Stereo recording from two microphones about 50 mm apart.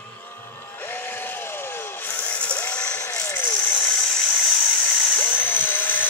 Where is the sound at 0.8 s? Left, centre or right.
Left.